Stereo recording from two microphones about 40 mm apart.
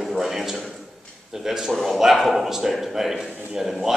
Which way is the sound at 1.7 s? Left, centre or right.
Centre.